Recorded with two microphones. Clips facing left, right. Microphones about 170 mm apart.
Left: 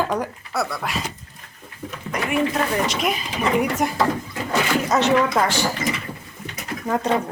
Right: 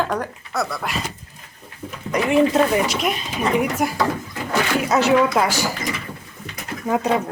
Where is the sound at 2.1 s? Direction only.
25° right (ahead or behind).